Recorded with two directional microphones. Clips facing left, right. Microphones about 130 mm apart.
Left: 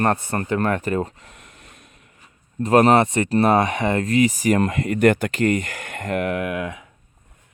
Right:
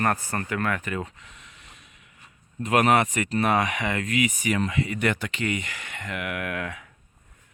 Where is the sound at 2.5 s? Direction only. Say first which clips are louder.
Left 6 dB; 35° left (ahead or behind).